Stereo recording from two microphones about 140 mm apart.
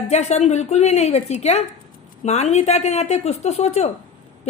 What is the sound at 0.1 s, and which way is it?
A woman's voice, 50° left (ahead or behind).